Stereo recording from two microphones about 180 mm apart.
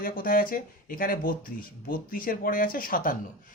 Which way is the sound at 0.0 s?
50° left (ahead or behind).